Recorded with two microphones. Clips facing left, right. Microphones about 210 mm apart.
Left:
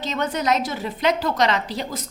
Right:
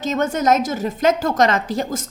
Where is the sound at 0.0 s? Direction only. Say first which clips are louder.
Right 5 dB; 45° right (ahead or behind).